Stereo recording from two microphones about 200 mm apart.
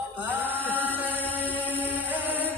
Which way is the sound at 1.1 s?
10° left (ahead or behind).